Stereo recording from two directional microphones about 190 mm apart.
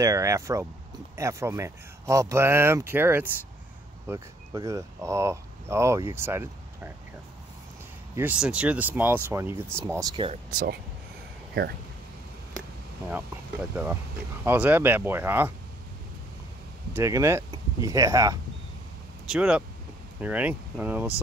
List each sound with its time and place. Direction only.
0.0 s speech: 15° right (ahead or behind)
8.2 s speech: 5° right (ahead or behind); by 10.4 s 25° right (ahead or behind)
10.5 s speech: 45° right (ahead or behind)
13.1 s speech: 10° right (ahead or behind)
16.9 s speech: 15° right (ahead or behind)
19.2 s speech: 5° right (ahead or behind)